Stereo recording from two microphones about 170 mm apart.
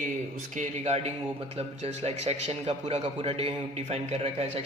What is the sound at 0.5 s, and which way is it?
A man's voice, 40° right (ahead or behind).